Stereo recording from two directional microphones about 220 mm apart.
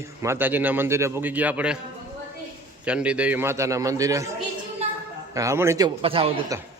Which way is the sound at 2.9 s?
5° right (ahead or behind).